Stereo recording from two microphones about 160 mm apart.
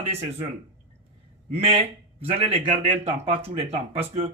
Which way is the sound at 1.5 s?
40° right (ahead or behind).